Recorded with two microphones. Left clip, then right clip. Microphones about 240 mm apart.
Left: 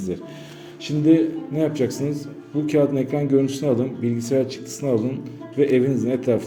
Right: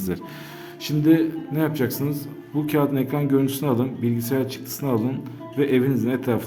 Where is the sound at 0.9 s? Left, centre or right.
Centre.